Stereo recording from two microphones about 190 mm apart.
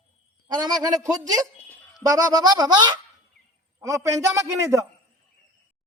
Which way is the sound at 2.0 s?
20° right (ahead or behind).